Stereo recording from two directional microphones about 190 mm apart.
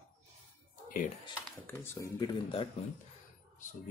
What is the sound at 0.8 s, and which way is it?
Typing, 45° left (ahead or behind).